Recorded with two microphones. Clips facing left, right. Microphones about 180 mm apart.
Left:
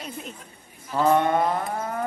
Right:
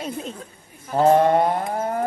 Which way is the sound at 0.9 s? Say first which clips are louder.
Right 4 dB; 35° right (ahead or behind).